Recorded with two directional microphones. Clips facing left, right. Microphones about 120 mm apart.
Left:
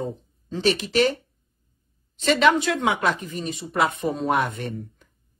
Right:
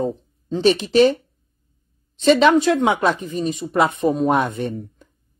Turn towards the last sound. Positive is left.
turn(degrees=-25)  # may be behind; listen again after turning